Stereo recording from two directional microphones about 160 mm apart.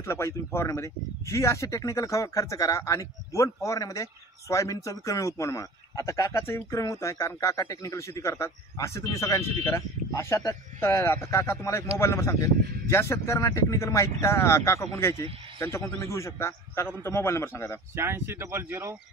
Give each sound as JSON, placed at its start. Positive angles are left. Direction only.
{"t": 0.0, "sound": "a man's voice", "side_deg": 15}
{"t": 17.9, "sound": "speech", "side_deg": -15}